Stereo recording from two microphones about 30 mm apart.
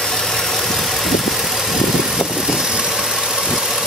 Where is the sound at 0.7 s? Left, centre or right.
Centre; by 3.0 s right.